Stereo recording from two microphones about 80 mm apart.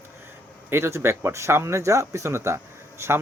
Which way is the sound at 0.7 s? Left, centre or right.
Right.